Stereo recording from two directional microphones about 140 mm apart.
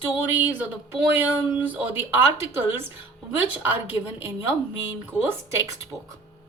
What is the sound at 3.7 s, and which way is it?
Speech, 15° right (ahead or behind).